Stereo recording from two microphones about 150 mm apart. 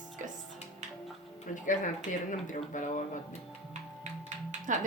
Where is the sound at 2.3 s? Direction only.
60° left (ahead or behind).